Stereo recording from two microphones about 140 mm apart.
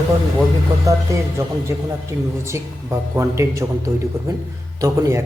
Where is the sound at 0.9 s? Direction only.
25° right (ahead or behind).